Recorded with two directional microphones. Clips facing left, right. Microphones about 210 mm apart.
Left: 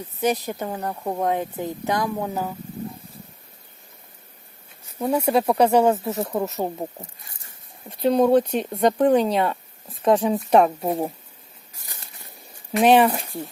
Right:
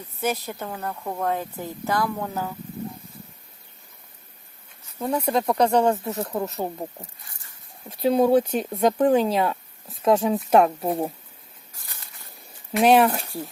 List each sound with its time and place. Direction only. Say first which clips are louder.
0.2 s a woman's voice: left 4 dB; 15° left (ahead or behind)
4.9 s speech: left 3 dB; 5° left (ahead or behind)
6.6 s speech: left 2 dB; 20° left (ahead or behind)
7.9 s speech: left 1 dB; 5° right (ahead or behind)
12.7 s speech: left 1 dB; centre (ahead or behind)